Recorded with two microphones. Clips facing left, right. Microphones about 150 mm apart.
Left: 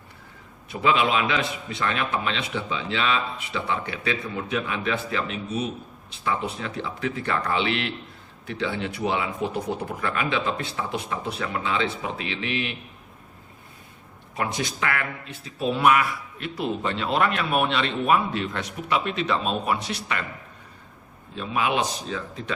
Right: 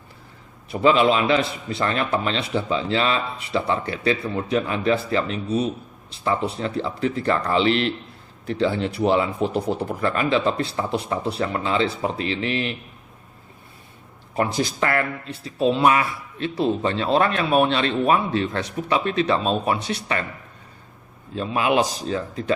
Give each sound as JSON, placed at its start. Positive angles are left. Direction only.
{"t": 0.7, "sound": "speech", "side_deg": -35}
{"t": 14.3, "sound": "speech", "side_deg": -35}
{"t": 21.3, "sound": "speech", "side_deg": -40}